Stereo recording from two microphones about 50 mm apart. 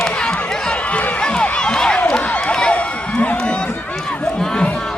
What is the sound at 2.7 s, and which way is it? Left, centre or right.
Crowd, left.